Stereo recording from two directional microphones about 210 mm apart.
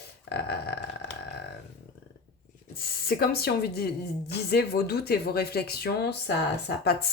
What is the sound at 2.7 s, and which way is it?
Speech, 45° left (ahead or behind).